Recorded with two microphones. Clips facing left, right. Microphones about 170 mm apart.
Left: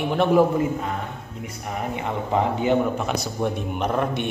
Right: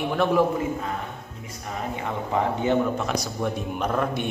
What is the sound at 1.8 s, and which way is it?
A man's voice, 20° left (ahead or behind).